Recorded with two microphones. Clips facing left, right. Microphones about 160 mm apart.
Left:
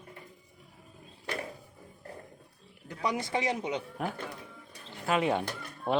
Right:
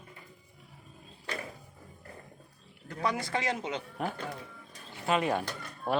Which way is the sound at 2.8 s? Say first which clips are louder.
Even; 15° left (ahead or behind).